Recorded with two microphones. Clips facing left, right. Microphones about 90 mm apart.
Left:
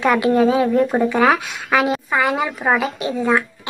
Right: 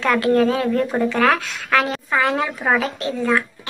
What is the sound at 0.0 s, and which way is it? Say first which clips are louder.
Speech: left 2 dB; 15° left (ahead or behind).